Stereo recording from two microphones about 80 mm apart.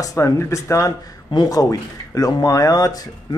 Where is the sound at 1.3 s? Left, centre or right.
Left.